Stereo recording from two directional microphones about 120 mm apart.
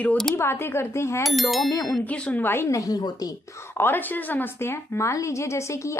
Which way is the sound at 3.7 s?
15° left (ahead or behind).